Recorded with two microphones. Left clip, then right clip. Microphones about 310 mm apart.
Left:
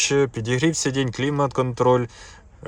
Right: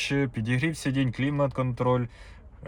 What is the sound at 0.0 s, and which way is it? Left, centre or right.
Speech, left.